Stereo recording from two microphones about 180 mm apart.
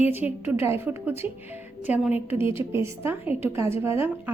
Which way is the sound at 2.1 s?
30° left (ahead or behind).